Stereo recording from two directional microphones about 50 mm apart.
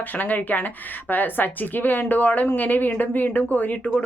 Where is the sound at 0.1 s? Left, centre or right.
Left.